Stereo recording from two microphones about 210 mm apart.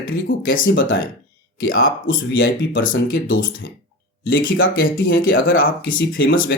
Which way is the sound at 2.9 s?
65° left (ahead or behind).